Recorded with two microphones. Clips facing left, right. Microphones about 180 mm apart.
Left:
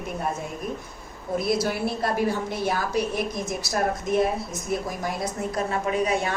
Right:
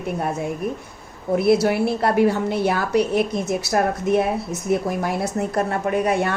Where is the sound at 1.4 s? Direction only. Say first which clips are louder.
Right 7 dB; 65° right (ahead or behind).